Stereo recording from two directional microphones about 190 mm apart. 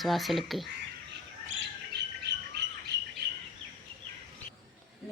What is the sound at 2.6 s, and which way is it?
Bird, 60° right (ahead or behind).